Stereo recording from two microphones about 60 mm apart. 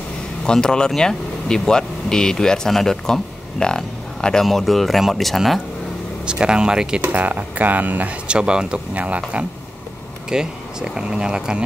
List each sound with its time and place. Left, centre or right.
0.5 s speech: centre
6.2 s speech: centre
7.0 s speech: right
10.3 s speech: centre